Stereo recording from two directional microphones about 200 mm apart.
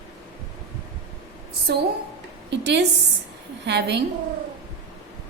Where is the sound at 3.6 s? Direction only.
60° right (ahead or behind).